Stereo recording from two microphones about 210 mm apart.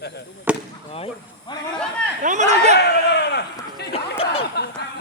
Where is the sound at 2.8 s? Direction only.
50° left (ahead or behind).